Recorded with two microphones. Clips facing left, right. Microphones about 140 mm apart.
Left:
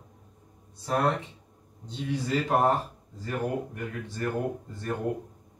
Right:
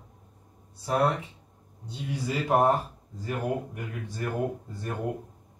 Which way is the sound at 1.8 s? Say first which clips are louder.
Left 2 dB; 10° right (ahead or behind).